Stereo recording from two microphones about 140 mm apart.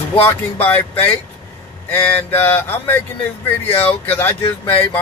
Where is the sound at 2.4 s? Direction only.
15° left (ahead or behind).